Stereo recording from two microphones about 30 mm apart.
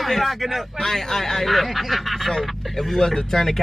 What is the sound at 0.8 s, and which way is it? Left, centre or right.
Speech, centre.